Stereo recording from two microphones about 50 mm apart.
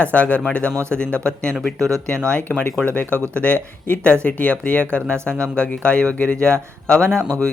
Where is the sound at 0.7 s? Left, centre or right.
Right.